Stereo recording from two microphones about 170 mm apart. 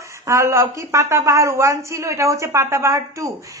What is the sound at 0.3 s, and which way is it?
A woman's voice, 15° right (ahead or behind).